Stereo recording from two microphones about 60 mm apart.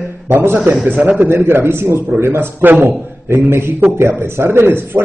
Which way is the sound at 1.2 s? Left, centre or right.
Right.